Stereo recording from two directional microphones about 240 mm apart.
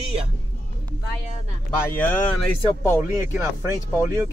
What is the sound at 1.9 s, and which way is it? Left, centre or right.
Speech, centre.